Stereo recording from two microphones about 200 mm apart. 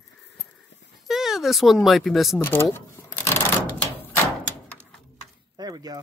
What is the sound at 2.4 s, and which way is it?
Shuffling cards, 10° left (ahead or behind).